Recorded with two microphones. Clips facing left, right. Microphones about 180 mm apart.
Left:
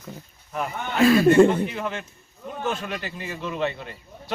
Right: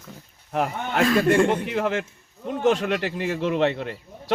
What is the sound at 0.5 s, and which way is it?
Speech, 70° right (ahead or behind).